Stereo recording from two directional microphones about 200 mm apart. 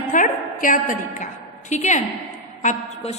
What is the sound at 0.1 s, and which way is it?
A woman's voice, 40° left (ahead or behind).